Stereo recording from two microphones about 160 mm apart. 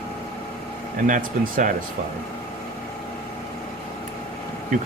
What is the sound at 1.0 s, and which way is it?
Speech, 55° right (ahead or behind).